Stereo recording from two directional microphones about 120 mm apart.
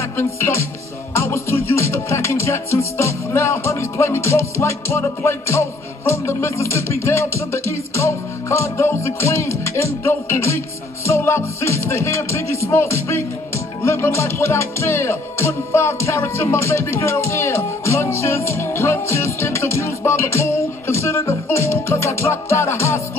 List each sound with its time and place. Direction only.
0.2 s music: 20° left (ahead or behind)